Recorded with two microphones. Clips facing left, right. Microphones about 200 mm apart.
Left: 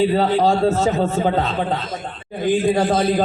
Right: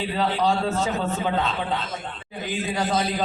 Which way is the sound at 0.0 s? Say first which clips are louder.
Left 7 dB; 45° left (ahead or behind).